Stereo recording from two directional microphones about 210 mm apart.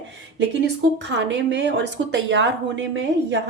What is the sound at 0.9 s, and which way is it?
A woman's voice, 60° right (ahead or behind).